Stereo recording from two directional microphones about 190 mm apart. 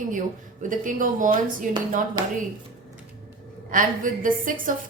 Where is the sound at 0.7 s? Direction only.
45° right (ahead or behind).